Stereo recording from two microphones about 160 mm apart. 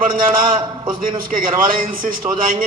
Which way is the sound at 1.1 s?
60° right (ahead or behind).